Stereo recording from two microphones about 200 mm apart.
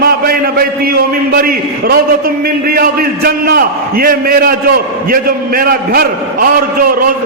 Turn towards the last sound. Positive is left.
turn(degrees=-50)  # may be behind; listen again after turning